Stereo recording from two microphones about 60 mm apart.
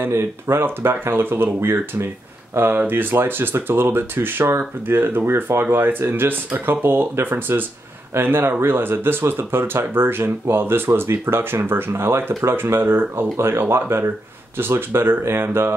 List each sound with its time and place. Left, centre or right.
0.0 s speech: right